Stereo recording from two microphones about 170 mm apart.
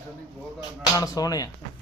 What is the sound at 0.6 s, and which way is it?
Speech, 20° left (ahead or behind).